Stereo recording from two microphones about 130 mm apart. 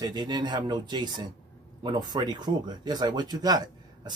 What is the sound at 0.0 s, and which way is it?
Speech, 35° right (ahead or behind).